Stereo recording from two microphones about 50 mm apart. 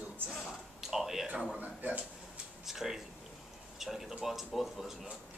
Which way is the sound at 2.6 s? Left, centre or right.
Centre.